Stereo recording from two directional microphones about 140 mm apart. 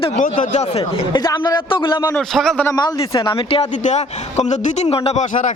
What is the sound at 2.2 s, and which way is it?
Speech, 5° left (ahead or behind).